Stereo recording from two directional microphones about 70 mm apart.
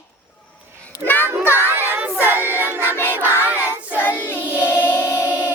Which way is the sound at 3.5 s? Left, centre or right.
Right.